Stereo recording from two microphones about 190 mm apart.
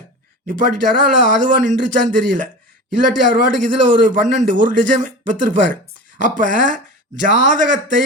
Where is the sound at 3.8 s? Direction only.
45° right (ahead or behind).